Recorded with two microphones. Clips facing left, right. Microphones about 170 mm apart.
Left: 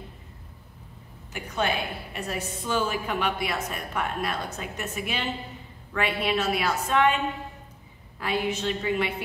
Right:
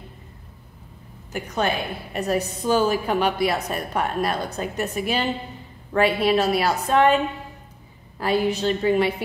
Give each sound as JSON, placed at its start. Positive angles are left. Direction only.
{"t": 1.3, "sound": "a woman's voice", "side_deg": -40}
{"t": 8.2, "sound": "a woman's voice", "side_deg": -35}